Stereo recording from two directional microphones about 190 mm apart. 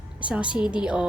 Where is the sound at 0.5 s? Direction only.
5° right (ahead or behind).